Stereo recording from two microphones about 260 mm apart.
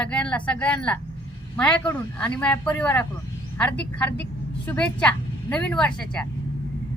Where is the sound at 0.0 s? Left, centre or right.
Centre.